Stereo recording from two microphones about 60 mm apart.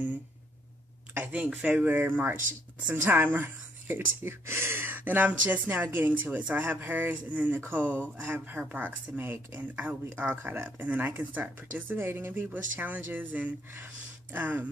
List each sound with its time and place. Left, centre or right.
1.1 s speech: right
1.9 s speech: right
12.0 s speech: right